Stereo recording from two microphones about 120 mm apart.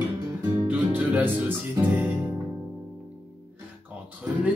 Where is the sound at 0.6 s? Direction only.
15° right (ahead or behind).